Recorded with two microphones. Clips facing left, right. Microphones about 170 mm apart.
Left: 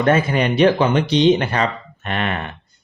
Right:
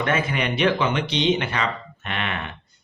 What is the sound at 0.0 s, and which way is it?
Speech, 40° left (ahead or behind).